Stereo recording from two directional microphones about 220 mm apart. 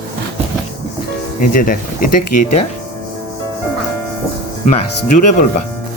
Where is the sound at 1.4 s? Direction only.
40° left (ahead or behind).